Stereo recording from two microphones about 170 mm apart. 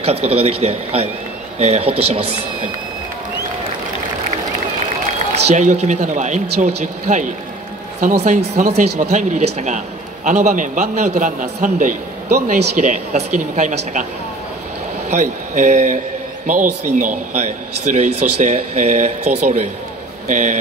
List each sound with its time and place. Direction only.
0.0 s a man's voice: 35° right (ahead or behind)
5.5 s speech: 40° right (ahead or behind)
15.0 s a man's voice: 45° right (ahead or behind)